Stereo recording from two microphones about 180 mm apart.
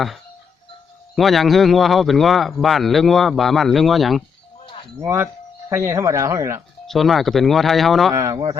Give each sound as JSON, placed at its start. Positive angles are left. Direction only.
{"t": 1.1, "sound": "speech", "side_deg": 0}
{"t": 4.6, "sound": "livestock", "side_deg": 30}
{"t": 4.9, "sound": "speech", "side_deg": -15}
{"t": 6.8, "sound": "speech", "side_deg": 0}
{"t": 8.1, "sound": "speech", "side_deg": -15}